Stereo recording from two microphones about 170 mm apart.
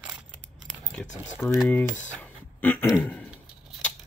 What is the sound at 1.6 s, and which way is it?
Speech, 10° left (ahead or behind).